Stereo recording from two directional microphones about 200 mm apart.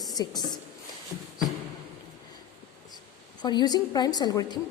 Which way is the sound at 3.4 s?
20° left (ahead or behind).